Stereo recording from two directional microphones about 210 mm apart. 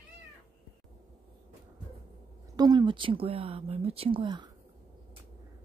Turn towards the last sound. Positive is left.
turn(degrees=-20)  # may be behind; listen again after turning